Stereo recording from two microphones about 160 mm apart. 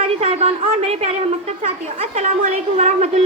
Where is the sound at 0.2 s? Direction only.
40° right (ahead or behind).